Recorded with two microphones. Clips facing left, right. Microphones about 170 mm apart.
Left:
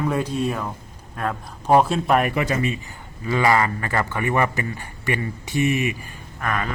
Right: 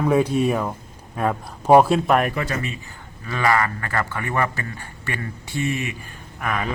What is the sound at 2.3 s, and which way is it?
A man's voice, 15° left (ahead or behind).